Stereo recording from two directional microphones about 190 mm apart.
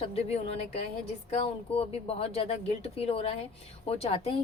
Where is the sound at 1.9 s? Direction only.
30° left (ahead or behind).